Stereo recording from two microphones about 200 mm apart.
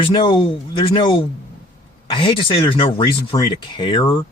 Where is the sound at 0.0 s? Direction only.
25° left (ahead or behind).